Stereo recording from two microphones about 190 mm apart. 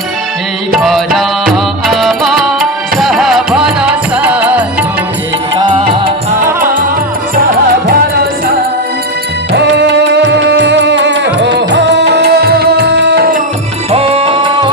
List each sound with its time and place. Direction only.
0.8 s music: centre (ahead or behind)
5.5 s music: 25° right (ahead or behind)
6.4 s music: 45° right (ahead or behind)
9.5 s music: 65° right (ahead or behind)
13.9 s music: 30° right (ahead or behind)